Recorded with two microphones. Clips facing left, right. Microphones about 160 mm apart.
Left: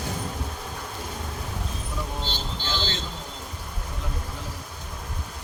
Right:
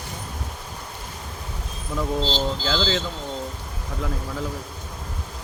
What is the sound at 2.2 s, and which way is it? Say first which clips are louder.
Speech: right 9 dB; 90° right.